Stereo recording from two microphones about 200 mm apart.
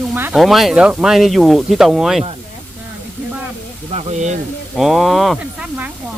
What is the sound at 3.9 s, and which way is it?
Speech, 35° right (ahead or behind).